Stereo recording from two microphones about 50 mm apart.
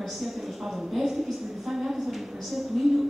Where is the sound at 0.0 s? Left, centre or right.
Centre.